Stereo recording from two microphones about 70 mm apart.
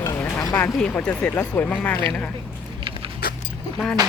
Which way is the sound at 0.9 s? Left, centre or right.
Left.